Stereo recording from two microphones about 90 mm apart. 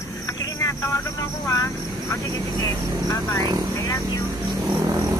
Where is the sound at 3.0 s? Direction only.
40° left (ahead or behind).